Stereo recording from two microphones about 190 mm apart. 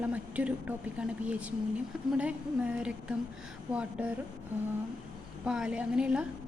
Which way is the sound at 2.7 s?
5° right (ahead or behind).